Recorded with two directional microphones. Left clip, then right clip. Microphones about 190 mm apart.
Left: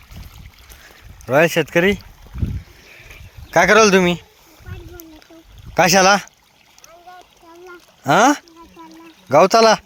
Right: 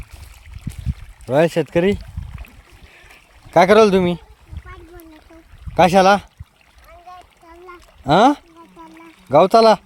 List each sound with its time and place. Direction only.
1.3 s speech: 15° right (ahead or behind)
3.5 s speech: 5° right (ahead or behind)
5.7 s speech: 5° right (ahead or behind)
8.0 s speech: 5° right (ahead or behind)